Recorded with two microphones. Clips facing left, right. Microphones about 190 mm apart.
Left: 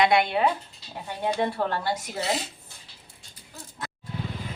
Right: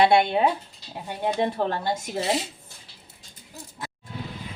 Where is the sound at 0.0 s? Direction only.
30° right (ahead or behind).